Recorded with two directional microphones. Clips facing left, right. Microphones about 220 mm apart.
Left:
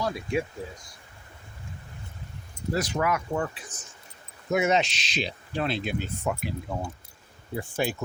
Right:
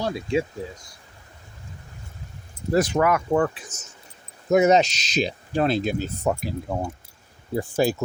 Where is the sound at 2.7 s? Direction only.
55° right (ahead or behind).